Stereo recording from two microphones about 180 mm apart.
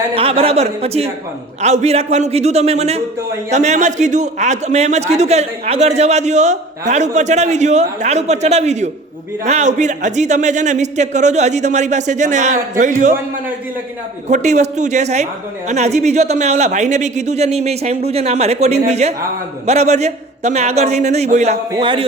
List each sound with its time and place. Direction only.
0.1 s a man's voice: 30° right (ahead or behind)
14.3 s a man's voice: 40° right (ahead or behind)